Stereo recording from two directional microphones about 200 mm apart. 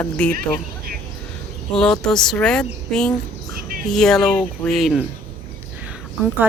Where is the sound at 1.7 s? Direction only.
5° left (ahead or behind).